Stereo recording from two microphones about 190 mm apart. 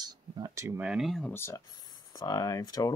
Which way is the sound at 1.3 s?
15° left (ahead or behind).